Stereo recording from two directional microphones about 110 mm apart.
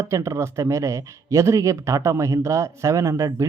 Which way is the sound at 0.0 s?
25° right (ahead or behind).